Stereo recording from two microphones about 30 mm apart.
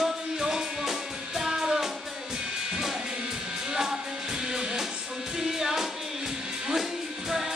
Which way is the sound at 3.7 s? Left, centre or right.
Centre.